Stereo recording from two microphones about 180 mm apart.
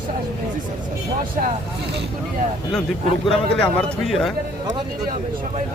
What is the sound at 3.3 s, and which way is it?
A man's voice, centre (ahead or behind).